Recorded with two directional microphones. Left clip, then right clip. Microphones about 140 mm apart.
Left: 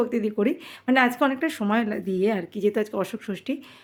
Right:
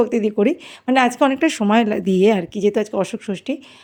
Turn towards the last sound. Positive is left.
turn(degrees=-30)  # may be behind; listen again after turning